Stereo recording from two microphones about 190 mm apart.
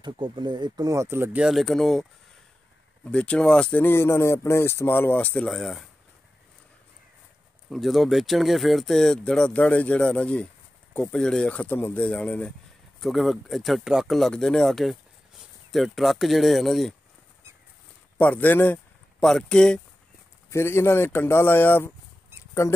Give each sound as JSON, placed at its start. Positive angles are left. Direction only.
{"t": 0.0, "sound": "speech", "side_deg": -25}
{"t": 3.1, "sound": "speech", "side_deg": 5}
{"t": 7.7, "sound": "speech", "side_deg": 0}
{"t": 18.1, "sound": "speech", "side_deg": 10}